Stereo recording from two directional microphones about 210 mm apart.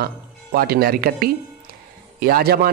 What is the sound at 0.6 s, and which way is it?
A man's voice, 45° right (ahead or behind).